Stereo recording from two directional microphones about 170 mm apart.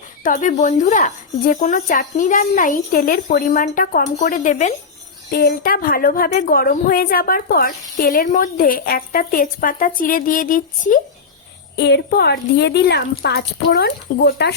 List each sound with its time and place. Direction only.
0.2 s speech: 50° left (ahead or behind)
5.3 s a woman's voice: 65° left (ahead or behind)
11.8 s speech: 80° left